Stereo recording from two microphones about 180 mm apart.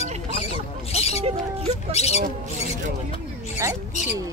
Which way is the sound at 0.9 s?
35° left (ahead or behind).